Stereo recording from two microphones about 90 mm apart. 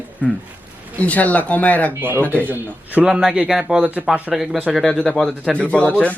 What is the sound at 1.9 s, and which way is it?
Speech, 25° right (ahead or behind).